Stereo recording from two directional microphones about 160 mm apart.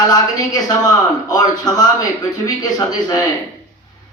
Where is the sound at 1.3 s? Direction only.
25° left (ahead or behind).